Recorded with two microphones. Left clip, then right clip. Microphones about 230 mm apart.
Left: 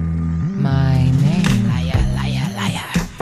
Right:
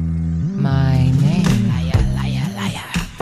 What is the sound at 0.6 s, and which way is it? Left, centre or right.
Music, centre.